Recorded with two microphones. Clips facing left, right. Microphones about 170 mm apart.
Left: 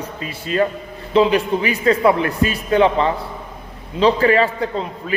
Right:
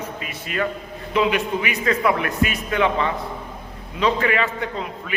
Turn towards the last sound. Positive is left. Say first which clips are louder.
# left 5 dB
turn(degrees=35)  # may be behind; listen again after turning